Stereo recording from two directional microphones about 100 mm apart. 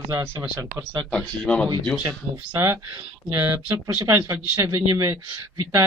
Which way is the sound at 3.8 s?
30° right (ahead or behind).